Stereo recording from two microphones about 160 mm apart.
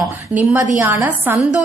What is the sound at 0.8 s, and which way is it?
Speech, 15° right (ahead or behind).